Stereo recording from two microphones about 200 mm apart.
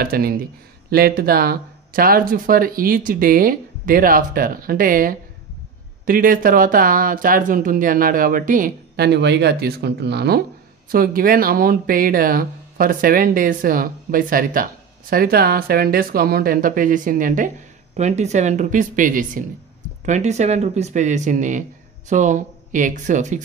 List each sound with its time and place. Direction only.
0.0 s speech: 45° right (ahead or behind)